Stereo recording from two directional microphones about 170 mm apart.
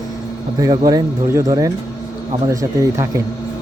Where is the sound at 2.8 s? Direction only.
20° right (ahead or behind).